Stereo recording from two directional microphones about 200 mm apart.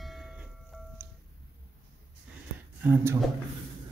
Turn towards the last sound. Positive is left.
turn(degrees=-10)  # may be behind; listen again after turning